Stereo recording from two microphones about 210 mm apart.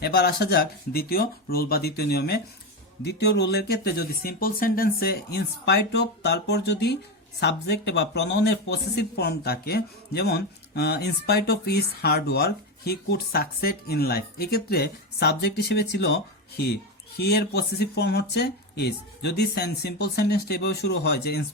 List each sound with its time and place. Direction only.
0.0 s speech: 50° left (ahead or behind)